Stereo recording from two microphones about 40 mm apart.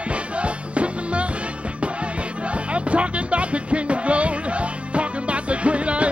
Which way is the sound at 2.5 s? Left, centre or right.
Right.